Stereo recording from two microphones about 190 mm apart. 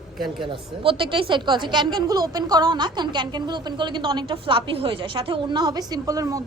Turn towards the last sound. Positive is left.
turn(degrees=-20)  # may be behind; listen again after turning